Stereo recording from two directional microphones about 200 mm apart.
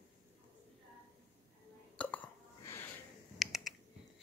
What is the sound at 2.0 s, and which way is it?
Hiccup, 10° left (ahead or behind).